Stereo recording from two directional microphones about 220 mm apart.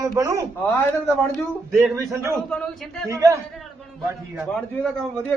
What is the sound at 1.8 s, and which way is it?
Speech, 10° right (ahead or behind).